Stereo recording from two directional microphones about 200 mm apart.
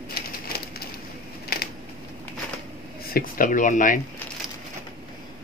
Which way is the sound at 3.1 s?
45° left (ahead or behind).